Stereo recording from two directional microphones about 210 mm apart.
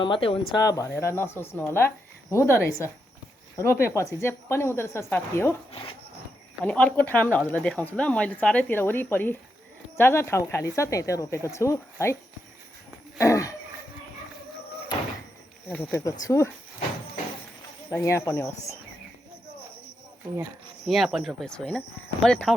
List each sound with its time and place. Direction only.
0.0 s speech: 25° left (ahead or behind)
6.7 s speech: 10° left (ahead or behind)
13.1 s a sound: 15° left (ahead or behind)
15.7 s speech: 10° left (ahead or behind)
17.9 s speech: 15° left (ahead or behind)
20.8 s speech: centre (ahead or behind)